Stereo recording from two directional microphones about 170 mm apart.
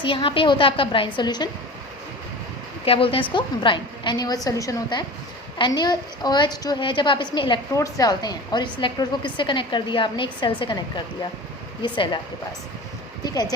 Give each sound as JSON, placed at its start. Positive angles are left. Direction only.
{"t": 0.0, "sound": "a woman's voice", "side_deg": 30}
{"t": 2.8, "sound": "a woman's voice", "side_deg": 35}
{"t": 13.2, "sound": "a woman's voice", "side_deg": 25}